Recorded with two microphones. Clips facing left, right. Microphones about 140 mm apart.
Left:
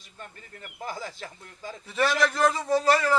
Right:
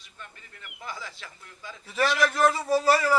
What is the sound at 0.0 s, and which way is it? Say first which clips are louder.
Speech: left 3 dB; 45° left (ahead or behind).